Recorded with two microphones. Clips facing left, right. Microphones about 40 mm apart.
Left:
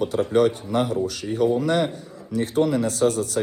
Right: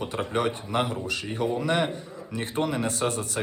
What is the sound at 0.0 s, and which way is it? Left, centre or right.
Speech, right.